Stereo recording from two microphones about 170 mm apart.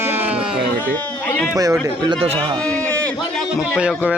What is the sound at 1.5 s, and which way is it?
Speech, 20° right (ahead or behind).